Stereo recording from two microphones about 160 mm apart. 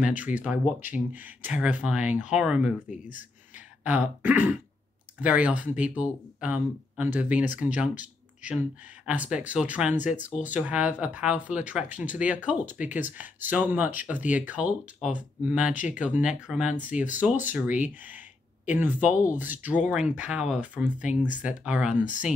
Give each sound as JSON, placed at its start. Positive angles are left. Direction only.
{"t": 0.0, "sound": "speech", "side_deg": -10}
{"t": 2.9, "sound": "speech", "side_deg": 55}
{"t": 3.5, "sound": "speech", "side_deg": -10}
{"t": 21.9, "sound": "speech", "side_deg": 55}